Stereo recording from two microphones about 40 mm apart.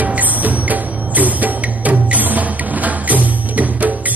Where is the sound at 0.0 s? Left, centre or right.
Right.